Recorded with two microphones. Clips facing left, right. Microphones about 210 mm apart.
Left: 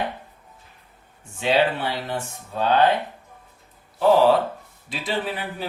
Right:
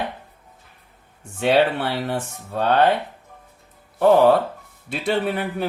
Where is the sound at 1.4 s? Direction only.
65° right (ahead or behind).